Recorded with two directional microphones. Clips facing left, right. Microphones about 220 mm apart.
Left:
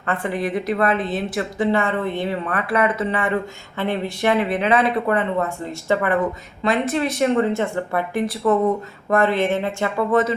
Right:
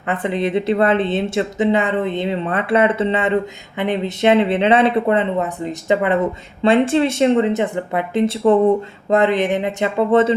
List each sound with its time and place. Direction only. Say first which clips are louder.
0.1 s speech: right 4 dB; 20° right (ahead or behind)